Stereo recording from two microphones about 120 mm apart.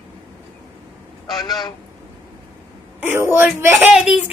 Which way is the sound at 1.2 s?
35° left (ahead or behind).